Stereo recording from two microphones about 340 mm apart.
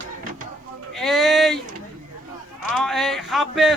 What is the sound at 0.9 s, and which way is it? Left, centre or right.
Speech, centre.